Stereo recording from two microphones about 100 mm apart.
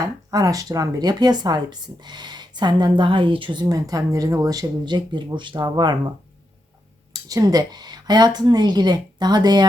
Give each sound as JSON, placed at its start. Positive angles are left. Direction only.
{"t": 0.3, "sound": "a woman's voice", "side_deg": -35}
{"t": 7.1, "sound": "a woman's voice", "side_deg": -35}